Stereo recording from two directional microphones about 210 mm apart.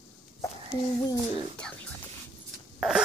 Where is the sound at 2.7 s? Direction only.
Centre (ahead or behind).